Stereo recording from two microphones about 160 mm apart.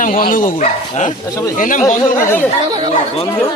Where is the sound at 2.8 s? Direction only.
40° left (ahead or behind).